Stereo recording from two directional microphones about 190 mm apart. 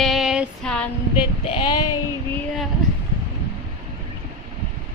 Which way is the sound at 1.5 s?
25° left (ahead or behind).